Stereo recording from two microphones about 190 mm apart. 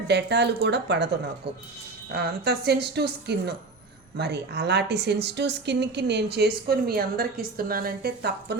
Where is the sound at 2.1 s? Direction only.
60° right (ahead or behind).